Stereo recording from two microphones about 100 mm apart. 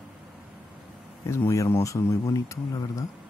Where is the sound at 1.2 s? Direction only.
30° left (ahead or behind).